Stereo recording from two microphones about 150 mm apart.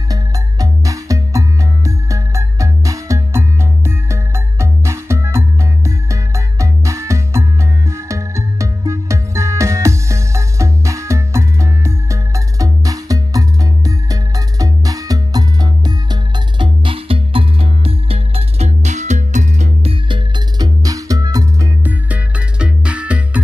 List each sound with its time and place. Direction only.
0.1 s music: 25° right (ahead or behind)
21.8 s music: 10° right (ahead or behind)